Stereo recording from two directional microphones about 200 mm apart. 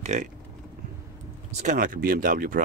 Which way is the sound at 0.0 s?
35° right (ahead or behind).